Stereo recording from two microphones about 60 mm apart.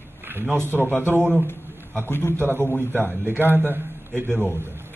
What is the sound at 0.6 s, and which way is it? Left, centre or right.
Speech, right.